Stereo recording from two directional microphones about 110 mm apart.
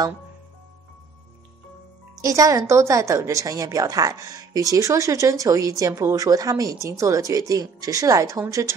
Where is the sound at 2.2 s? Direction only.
30° right (ahead or behind).